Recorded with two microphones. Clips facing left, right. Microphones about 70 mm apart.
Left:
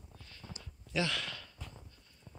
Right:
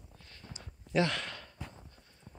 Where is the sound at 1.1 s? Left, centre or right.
Right.